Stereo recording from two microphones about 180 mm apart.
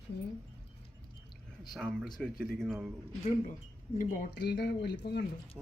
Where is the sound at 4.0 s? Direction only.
45° left (ahead or behind).